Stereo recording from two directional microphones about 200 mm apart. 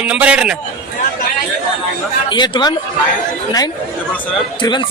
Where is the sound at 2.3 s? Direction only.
25° left (ahead or behind).